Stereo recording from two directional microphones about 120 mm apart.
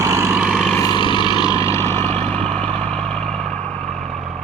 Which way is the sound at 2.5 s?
10° left (ahead or behind).